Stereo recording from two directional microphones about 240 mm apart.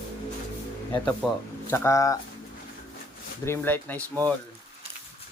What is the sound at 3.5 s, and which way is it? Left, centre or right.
Speech, centre.